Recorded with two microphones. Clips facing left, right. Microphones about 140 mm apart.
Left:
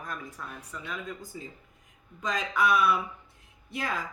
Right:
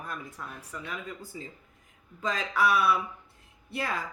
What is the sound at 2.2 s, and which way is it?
Speech, 15° left (ahead or behind).